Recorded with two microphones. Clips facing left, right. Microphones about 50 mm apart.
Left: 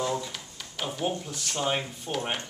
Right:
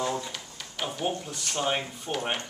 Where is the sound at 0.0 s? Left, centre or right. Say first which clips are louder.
Even; centre.